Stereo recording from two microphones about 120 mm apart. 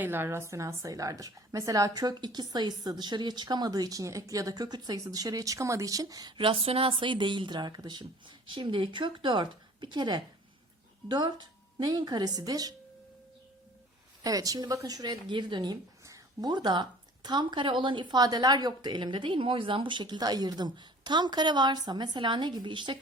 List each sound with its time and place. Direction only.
0.0 s a woman's voice: 20° right (ahead or behind)
14.3 s a woman's voice: 30° right (ahead or behind)